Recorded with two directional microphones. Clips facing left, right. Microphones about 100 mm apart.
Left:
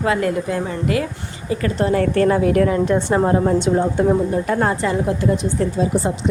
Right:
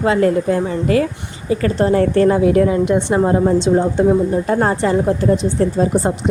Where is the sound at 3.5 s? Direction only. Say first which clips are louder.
Right 3 dB; 30° right (ahead or behind).